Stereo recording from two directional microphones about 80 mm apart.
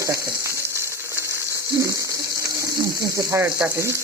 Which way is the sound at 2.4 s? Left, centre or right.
Right.